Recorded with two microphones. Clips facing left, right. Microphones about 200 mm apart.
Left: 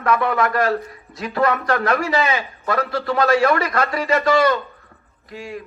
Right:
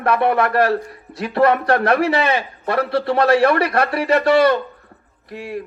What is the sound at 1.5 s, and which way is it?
Speech, 60° right (ahead or behind).